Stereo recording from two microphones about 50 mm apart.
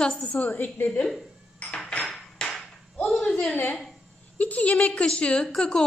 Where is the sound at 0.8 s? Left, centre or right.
Left.